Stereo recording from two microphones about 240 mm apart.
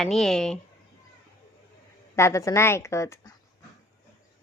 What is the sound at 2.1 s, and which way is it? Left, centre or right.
A woman's voice, centre.